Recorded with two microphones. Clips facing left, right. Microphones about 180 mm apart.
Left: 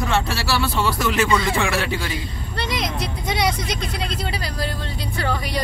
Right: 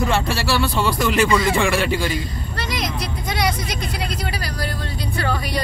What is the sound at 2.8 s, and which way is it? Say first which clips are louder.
Speech: even; 25° left (ahead or behind).